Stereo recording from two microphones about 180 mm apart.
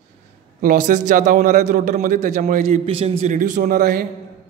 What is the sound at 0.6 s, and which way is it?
A man's voice, 50° right (ahead or behind).